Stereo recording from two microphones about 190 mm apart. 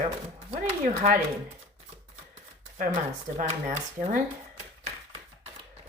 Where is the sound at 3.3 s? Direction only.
40° right (ahead or behind).